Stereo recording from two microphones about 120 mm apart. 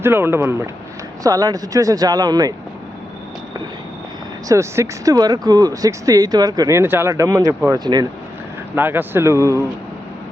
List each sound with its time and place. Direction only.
0.0 s speech: 20° right (ahead or behind)
4.4 s speech: 25° right (ahead or behind)
8.7 s speech: 15° right (ahead or behind)